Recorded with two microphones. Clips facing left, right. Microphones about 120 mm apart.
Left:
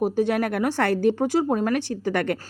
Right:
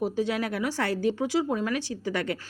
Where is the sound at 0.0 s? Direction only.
55° left (ahead or behind).